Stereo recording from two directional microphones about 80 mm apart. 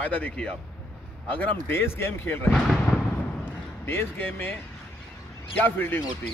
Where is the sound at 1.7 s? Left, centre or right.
Left.